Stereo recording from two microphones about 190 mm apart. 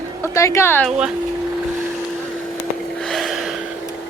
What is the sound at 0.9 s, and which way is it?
Speech, 5° right (ahead or behind).